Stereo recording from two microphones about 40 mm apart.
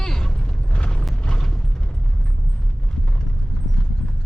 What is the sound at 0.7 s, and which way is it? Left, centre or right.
Mechanisms, left.